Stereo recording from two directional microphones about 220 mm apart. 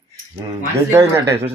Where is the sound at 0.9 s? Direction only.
15° right (ahead or behind).